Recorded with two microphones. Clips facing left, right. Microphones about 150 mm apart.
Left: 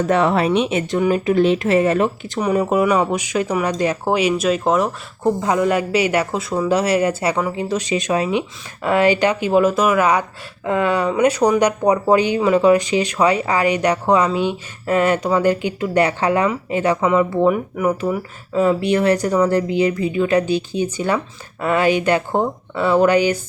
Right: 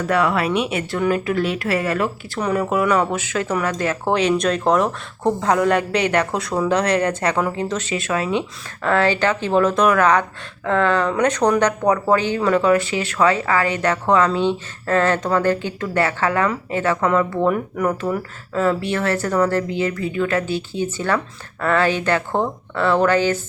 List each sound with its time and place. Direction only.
0.0 s speech: 25° left (ahead or behind)